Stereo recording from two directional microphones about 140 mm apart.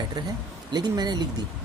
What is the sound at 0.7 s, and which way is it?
Speech, 30° right (ahead or behind).